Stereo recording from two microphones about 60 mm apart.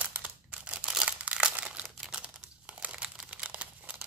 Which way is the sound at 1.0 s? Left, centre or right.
Right.